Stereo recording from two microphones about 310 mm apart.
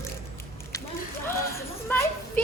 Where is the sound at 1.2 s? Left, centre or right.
Centre.